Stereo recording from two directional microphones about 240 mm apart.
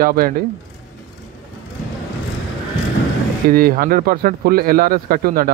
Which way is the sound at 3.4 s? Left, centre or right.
Right.